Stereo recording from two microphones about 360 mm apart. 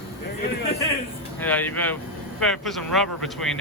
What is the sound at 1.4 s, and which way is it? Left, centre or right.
Speech, centre.